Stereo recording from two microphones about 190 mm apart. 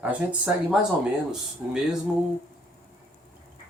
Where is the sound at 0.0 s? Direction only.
5° right (ahead or behind).